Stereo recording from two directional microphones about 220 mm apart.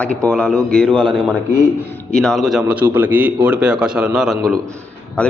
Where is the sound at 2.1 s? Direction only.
Centre (ahead or behind).